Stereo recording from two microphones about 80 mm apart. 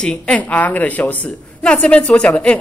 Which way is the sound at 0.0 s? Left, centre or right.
Centre.